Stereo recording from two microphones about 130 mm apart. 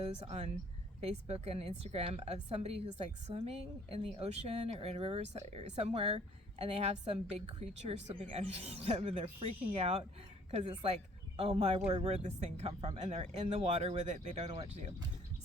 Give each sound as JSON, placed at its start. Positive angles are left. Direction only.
{"t": 0.0, "sound": "a woman's voice", "side_deg": -55}